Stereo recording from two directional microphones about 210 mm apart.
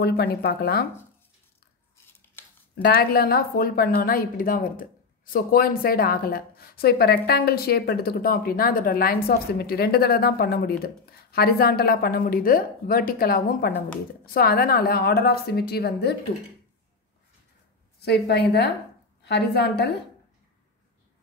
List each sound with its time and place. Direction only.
0.0 s speech: 50° left (ahead or behind)
2.8 s speech: 45° left (ahead or behind)
18.0 s speech: 50° left (ahead or behind)